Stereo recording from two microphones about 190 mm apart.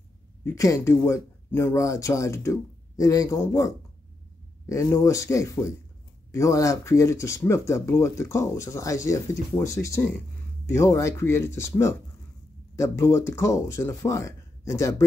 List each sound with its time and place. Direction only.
0.4 s speech: 15° left (ahead or behind)